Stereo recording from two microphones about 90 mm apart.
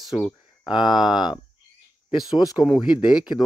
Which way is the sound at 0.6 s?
55° left (ahead or behind).